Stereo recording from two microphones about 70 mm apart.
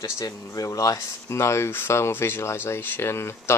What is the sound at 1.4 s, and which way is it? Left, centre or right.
Speech, left.